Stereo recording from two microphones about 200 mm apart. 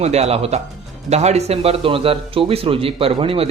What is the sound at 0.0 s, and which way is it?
A man's voice, 30° right (ahead or behind).